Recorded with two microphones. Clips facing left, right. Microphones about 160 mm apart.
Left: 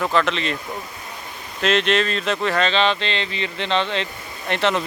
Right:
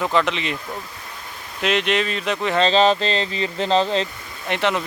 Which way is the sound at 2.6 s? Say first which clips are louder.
Right 8 dB; 35° right (ahead or behind).